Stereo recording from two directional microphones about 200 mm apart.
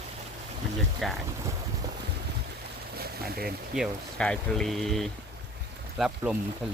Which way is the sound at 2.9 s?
50° right (ahead or behind).